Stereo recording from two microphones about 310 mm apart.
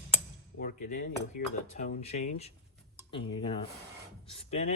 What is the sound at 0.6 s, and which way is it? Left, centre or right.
Speech, left.